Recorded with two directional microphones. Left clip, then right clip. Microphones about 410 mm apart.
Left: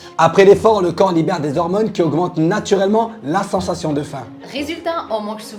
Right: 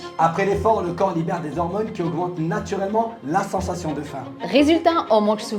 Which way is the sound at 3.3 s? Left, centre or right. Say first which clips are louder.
Left 4 dB; left.